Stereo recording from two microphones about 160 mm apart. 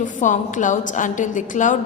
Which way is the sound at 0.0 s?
50° left (ahead or behind).